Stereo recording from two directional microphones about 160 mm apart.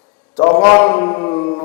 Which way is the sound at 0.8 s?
15° left (ahead or behind).